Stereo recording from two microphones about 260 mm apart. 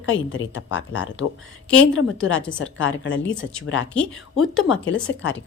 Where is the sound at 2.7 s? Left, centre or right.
Left.